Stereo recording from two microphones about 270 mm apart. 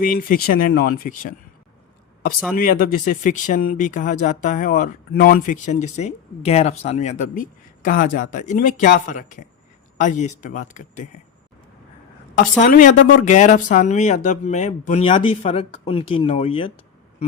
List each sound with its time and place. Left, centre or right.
0.0 s speech: left
2.6 s speech: left
12.3 s speech: left